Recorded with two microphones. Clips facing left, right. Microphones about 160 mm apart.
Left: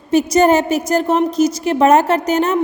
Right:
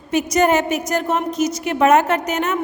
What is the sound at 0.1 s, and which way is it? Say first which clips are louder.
A woman's voice: left 4 dB; 30° left (ahead or behind).